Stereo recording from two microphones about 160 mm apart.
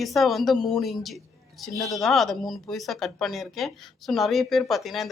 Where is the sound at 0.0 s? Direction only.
Centre (ahead or behind).